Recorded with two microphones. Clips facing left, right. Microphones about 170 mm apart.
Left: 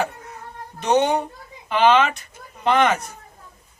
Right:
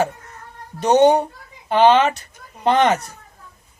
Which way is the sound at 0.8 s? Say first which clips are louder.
Right 5 dB; 40° right (ahead or behind).